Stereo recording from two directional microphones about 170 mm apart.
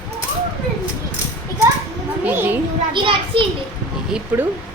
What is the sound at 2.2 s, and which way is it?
Speech, 10° right (ahead or behind).